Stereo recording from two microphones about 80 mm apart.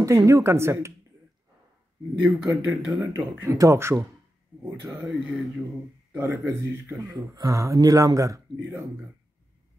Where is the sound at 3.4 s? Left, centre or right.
Right.